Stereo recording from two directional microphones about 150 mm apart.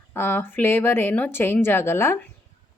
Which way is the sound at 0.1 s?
15° left (ahead or behind).